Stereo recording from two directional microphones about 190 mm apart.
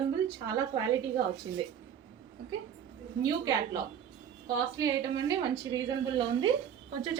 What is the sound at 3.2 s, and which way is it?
A woman's voice, 20° right (ahead or behind).